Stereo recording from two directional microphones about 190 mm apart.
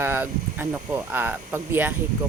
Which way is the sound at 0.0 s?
10° right (ahead or behind).